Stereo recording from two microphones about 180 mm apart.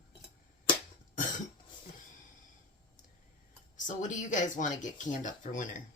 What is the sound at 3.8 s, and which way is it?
Speech, 45° left (ahead or behind).